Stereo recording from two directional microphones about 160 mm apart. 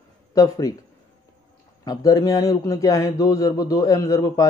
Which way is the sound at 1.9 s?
20° left (ahead or behind).